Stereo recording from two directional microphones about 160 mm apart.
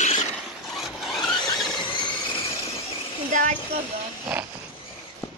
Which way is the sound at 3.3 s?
55° right (ahead or behind).